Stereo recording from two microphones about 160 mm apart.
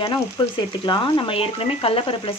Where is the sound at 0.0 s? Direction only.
30° left (ahead or behind).